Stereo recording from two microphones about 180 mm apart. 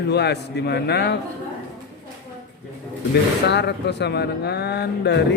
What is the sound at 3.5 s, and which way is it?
A man's voice, 70° left (ahead or behind).